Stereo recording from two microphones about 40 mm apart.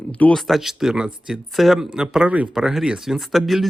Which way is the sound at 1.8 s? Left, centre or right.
Centre.